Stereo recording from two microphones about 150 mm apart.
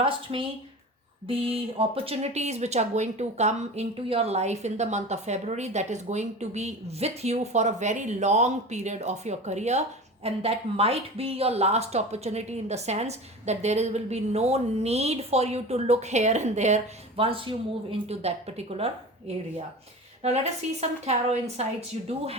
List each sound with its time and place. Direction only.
0.0 s speech: 35° right (ahead or behind)
20.2 s speech: 45° right (ahead or behind)